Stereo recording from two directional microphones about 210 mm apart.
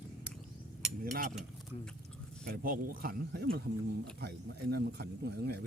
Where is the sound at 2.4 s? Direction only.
45° right (ahead or behind).